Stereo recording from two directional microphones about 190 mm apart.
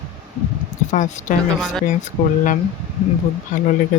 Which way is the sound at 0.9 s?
40° left (ahead or behind).